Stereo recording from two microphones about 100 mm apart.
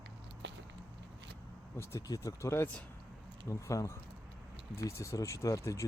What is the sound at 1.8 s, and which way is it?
Speech, 30° left (ahead or behind).